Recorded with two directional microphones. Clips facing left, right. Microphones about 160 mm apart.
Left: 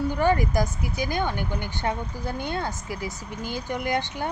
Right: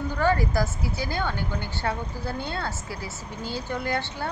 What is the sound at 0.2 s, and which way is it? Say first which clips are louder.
Speech: even; 15° left (ahead or behind).